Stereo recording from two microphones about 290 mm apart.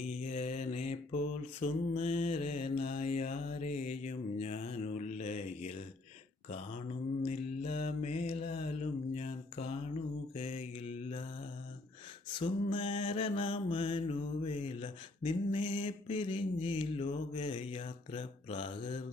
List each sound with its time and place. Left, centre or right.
0.3 s mantra: left
7.3 s mantra: left
12.3 s mantra: centre